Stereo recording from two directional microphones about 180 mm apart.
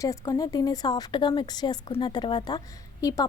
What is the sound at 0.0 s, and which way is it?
Speech, 20° left (ahead or behind).